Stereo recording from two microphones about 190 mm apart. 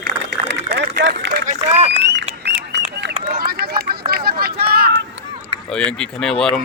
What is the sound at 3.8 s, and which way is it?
Run, 55° right (ahead or behind).